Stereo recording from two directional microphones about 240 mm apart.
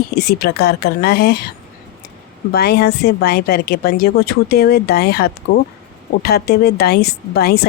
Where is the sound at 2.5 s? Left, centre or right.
Left.